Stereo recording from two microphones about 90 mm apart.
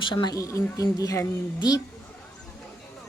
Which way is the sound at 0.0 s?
60° left (ahead or behind).